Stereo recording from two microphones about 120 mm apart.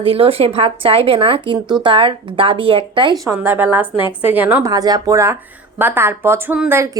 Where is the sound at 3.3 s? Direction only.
15° right (ahead or behind).